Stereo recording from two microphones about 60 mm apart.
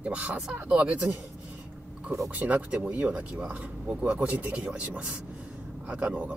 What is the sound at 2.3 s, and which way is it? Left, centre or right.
Speech, right.